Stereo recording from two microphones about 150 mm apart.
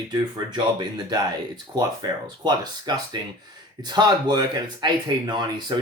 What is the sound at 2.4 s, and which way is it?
Speech, 30° right (ahead or behind).